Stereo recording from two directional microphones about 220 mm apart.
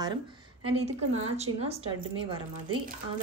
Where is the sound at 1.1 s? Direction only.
30° right (ahead or behind).